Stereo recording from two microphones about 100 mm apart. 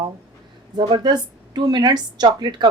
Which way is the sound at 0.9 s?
50° right (ahead or behind).